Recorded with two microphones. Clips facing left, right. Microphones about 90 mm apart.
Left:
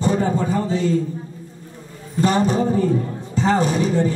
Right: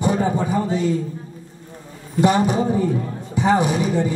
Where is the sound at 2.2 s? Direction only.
15° right (ahead or behind).